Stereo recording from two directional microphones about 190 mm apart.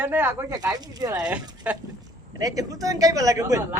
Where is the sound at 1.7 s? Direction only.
10° right (ahead or behind).